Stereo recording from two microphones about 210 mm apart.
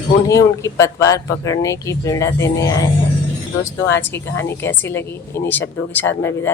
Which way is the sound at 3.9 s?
10° left (ahead or behind).